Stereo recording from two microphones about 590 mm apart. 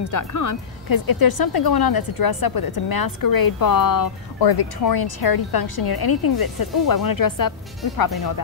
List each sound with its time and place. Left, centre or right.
0.0 s speech: left